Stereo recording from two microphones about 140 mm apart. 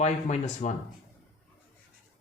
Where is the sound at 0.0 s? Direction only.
55° left (ahead or behind).